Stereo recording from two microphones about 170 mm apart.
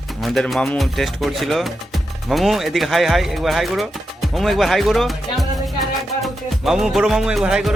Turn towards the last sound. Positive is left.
turn(degrees=-5)  # may be behind; listen again after turning